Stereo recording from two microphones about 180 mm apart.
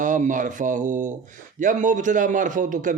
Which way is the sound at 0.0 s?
45° right (ahead or behind).